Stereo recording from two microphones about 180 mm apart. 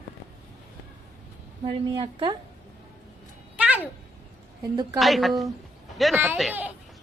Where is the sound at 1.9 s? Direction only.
25° right (ahead or behind).